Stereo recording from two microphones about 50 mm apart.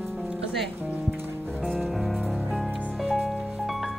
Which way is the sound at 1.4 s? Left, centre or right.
Centre.